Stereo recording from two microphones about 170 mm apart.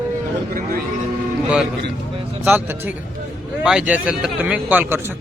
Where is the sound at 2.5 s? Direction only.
10° right (ahead or behind).